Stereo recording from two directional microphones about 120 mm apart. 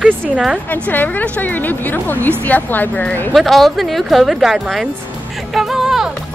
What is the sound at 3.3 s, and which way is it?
Speech, centre (ahead or behind).